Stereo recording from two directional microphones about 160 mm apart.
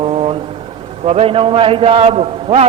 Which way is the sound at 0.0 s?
35° right (ahead or behind).